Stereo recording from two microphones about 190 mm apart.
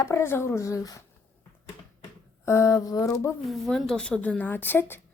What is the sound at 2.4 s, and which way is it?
Speech, 15° left (ahead or behind).